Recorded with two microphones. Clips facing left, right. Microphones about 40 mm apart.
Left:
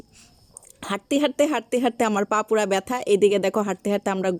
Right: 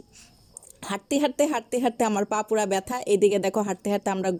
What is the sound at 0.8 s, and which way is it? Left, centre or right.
Speech, left.